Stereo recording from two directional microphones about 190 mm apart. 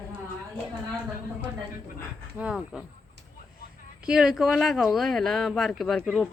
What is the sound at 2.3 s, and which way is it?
Speech, 5° right (ahead or behind).